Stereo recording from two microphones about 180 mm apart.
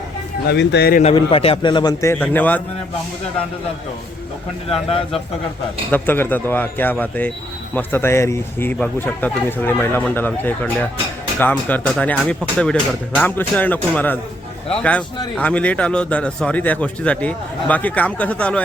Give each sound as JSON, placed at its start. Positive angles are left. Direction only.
{"t": 0.4, "sound": "speech", "side_deg": 70}
{"t": 1.0, "sound": "a man's voice", "side_deg": 30}
{"t": 2.1, "sound": "speech", "side_deg": 10}
{"t": 4.7, "sound": "speech", "side_deg": 30}
{"t": 5.9, "sound": "speech", "side_deg": 10}